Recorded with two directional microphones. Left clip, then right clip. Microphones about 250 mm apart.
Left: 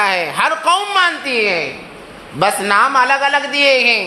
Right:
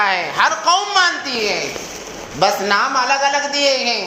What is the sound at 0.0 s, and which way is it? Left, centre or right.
A woman's voice, left.